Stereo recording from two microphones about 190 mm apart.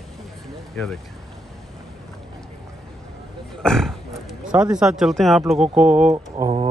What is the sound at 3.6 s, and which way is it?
Speech, centre (ahead or behind).